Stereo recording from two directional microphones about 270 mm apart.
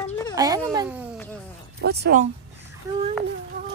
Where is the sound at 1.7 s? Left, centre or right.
Right.